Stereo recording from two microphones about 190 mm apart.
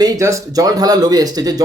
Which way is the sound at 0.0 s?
15° right (ahead or behind).